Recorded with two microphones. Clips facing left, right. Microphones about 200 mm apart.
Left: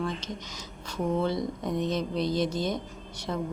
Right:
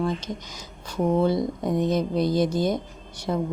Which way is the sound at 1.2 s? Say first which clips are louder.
Right 6 dB; 10° right (ahead or behind).